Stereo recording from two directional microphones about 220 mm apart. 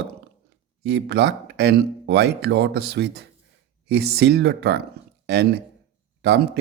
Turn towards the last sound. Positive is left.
turn(degrees=-45)  # may be behind; listen again after turning